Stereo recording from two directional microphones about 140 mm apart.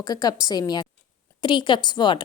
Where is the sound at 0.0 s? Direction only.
25° left (ahead or behind).